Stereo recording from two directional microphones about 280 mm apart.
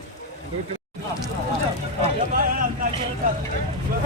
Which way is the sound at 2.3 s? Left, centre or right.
Right.